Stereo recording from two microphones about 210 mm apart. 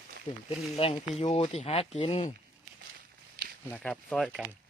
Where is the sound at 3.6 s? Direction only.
5° left (ahead or behind).